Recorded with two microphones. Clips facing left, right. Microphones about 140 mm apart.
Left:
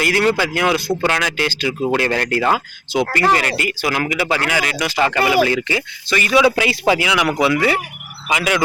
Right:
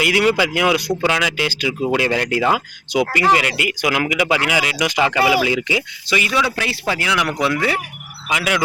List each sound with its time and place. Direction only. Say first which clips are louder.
0.0 s speech: even; 15° right (ahead or behind)
6.3 s a man's voice: left 6 dB; 15° left (ahead or behind); by 8.6 s centre (ahead or behind)